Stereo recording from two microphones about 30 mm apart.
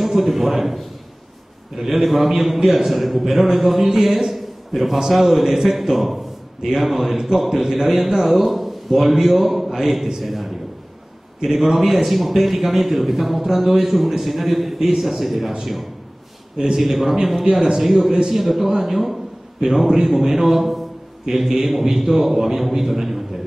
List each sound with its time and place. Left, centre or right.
0.4 s a man's voice: centre
1.8 s a man's voice: centre
2.6 s a man's voice: centre
2.9 s a man's voice: centre
16.5 s a man's voice: right
16.8 s a man's voice: centre
17.5 s speech: right
17.7 s a man's voice: centre
21.3 s a man's voice: centre